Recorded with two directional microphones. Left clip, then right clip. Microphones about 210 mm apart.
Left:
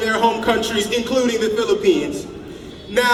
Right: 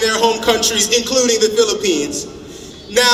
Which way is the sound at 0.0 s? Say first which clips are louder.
Right 3 dB; 25° right (ahead or behind).